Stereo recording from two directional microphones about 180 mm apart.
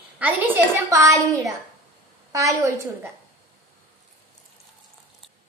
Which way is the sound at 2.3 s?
15° right (ahead or behind).